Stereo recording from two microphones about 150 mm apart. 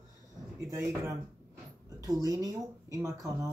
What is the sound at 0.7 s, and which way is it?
Speech, 20° right (ahead or behind).